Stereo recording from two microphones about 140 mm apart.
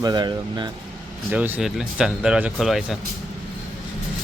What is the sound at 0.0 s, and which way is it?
Speech, 30° right (ahead or behind).